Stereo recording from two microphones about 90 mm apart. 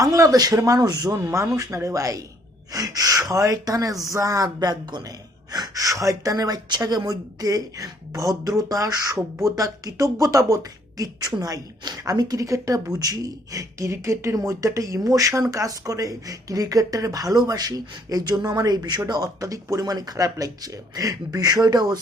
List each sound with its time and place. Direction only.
0.0 s a woman's voice: 40° right (ahead or behind)
1.2 s a woman's voice: 35° right (ahead or behind)